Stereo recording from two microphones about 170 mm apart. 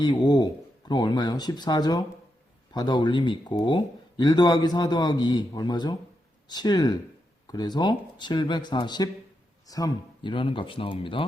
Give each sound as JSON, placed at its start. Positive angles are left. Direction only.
{"t": 0.0, "sound": "speech", "side_deg": 25}